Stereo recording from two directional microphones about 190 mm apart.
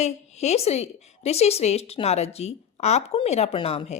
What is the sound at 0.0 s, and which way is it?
Speech, 35° left (ahead or behind).